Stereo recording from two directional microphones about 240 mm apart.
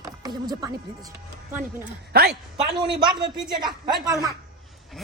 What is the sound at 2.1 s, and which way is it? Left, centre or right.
Speech, right.